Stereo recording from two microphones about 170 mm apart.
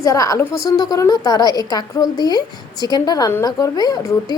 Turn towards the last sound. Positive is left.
turn(degrees=25)  # may be behind; listen again after turning